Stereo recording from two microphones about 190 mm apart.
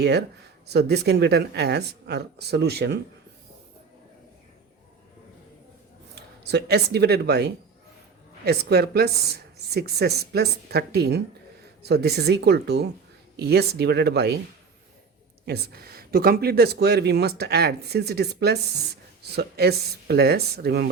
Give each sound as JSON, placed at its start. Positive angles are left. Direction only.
{"t": 0.0, "sound": "speech", "side_deg": -60}
{"t": 6.1, "sound": "speech", "side_deg": -60}
{"t": 15.4, "sound": "speech", "side_deg": -55}